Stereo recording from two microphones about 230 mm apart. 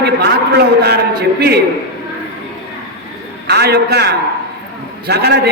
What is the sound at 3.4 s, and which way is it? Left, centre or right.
A man's voice, right.